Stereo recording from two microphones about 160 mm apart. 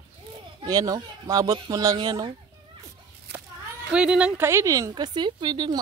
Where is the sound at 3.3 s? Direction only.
90° right.